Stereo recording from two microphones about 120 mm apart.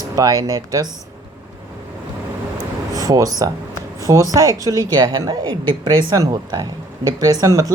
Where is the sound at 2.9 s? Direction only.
30° right (ahead or behind).